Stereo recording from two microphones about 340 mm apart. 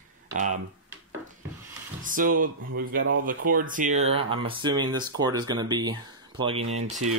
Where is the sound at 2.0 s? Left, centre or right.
Right.